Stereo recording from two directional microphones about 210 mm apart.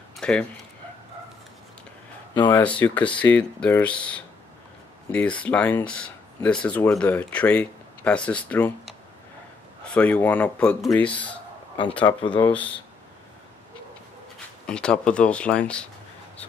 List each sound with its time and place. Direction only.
0.2 s speech: 5° left (ahead or behind)
2.3 s speech: 20° left (ahead or behind)
2.6 s speech: 5° left (ahead or behind)
14.7 s speech: 5° left (ahead or behind)